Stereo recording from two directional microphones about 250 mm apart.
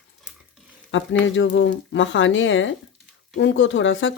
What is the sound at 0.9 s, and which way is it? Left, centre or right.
Speech, left.